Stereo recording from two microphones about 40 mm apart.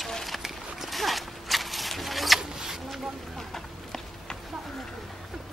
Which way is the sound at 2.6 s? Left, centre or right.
Centre.